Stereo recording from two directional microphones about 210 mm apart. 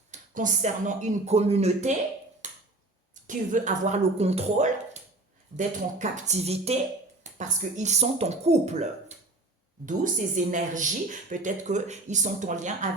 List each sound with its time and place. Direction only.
0.1 s speech: 35° right (ahead or behind)
2.4 s a sound: 35° right (ahead or behind)
3.2 s speech: 35° right (ahead or behind)